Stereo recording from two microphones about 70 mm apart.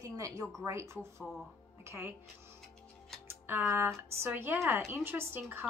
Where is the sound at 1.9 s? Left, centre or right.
Right.